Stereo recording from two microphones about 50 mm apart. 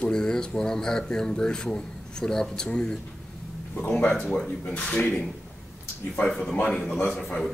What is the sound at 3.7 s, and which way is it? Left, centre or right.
Speech, left.